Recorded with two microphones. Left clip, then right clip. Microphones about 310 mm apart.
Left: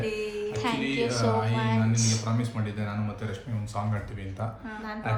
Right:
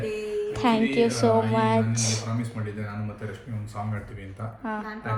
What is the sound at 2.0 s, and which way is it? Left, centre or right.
Speech, centre.